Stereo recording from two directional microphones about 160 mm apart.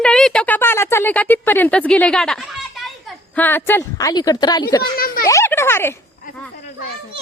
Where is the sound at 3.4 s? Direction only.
10° left (ahead or behind).